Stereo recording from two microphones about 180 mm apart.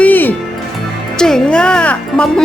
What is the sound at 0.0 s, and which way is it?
Music, 10° left (ahead or behind).